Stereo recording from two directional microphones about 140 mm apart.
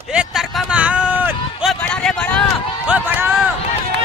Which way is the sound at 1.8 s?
5° left (ahead or behind).